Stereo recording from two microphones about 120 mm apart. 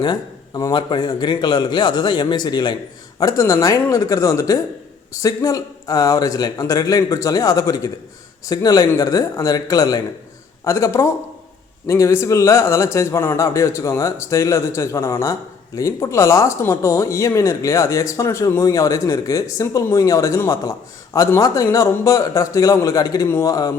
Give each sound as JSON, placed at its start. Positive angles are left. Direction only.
{"t": 0.0, "sound": "a man's voice", "side_deg": 35}